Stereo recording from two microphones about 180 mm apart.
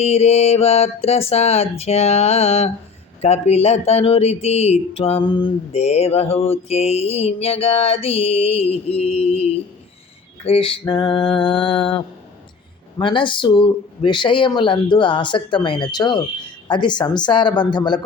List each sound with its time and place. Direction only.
0.0 s speech: 35° left (ahead or behind)